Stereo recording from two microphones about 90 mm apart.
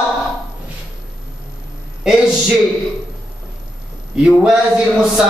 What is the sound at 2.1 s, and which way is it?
Speech, 5° right (ahead or behind).